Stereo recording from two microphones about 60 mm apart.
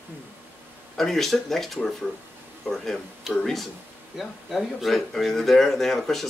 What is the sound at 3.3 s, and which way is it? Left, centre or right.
Speech, centre.